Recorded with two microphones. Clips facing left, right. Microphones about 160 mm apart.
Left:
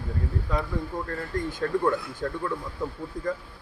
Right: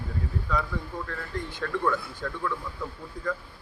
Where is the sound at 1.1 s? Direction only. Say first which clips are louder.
Left 5 dB; 40° left (ahead or behind).